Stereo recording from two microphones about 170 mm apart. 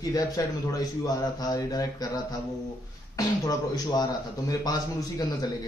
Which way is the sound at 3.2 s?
20° left (ahead or behind).